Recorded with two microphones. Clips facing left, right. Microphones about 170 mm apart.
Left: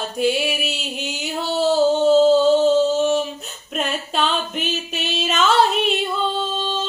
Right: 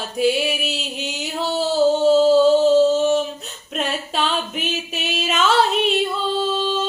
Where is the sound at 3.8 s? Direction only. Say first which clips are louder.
Left 1 dB; centre (ahead or behind).